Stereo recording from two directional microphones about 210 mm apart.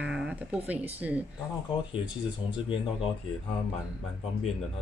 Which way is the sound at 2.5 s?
25° left (ahead or behind).